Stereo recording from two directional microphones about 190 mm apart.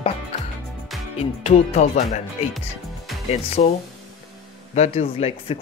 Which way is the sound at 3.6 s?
35° left (ahead or behind).